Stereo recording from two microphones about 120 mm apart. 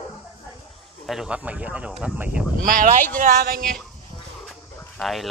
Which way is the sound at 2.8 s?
90° right.